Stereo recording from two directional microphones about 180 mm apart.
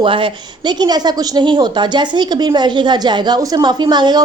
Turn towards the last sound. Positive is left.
turn(degrees=-25)  # may be behind; listen again after turning